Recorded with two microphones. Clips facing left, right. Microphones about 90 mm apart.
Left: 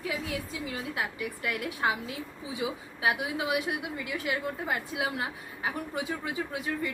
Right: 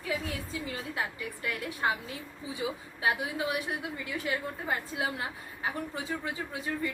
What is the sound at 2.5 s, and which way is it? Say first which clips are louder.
A woman's voice: left 1 dB; 15° left (ahead or behind).